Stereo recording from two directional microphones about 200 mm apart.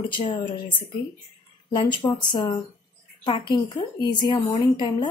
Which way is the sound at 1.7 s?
20° left (ahead or behind).